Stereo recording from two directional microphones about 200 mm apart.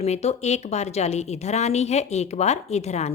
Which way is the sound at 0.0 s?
30° left (ahead or behind).